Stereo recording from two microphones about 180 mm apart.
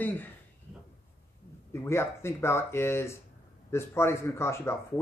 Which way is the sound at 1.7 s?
15° left (ahead or behind).